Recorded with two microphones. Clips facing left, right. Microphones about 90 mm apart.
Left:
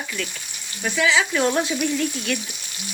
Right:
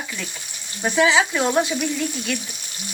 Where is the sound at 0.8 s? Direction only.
25° right (ahead or behind).